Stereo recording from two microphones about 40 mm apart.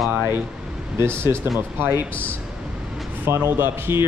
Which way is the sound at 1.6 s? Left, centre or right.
Right.